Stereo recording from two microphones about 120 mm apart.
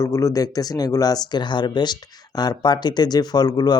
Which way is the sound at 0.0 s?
25° left (ahead or behind).